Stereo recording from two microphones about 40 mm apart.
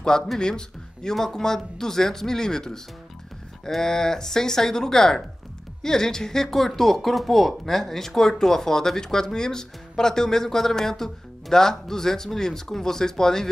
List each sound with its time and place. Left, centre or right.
0.4 s speech: centre